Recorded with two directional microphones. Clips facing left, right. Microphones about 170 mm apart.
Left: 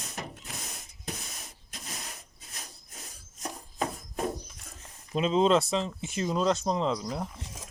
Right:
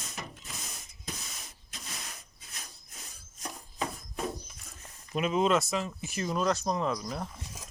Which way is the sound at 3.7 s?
45° left (ahead or behind).